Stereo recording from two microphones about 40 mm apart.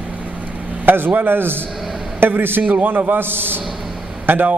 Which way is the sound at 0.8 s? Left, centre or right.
Right.